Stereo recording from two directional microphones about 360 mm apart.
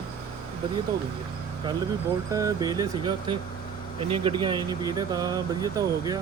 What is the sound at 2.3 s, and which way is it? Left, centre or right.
Speech, centre.